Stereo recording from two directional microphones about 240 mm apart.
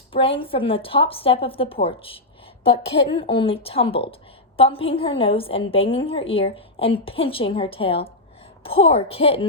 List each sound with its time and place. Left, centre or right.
0.1 s a woman's voice: left